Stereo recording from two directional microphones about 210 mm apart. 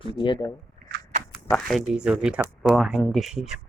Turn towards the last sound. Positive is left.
turn(degrees=0)  # may be behind; listen again after turning